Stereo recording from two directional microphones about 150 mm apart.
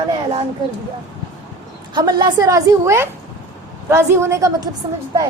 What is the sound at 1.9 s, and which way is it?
A woman's voice, 30° right (ahead or behind).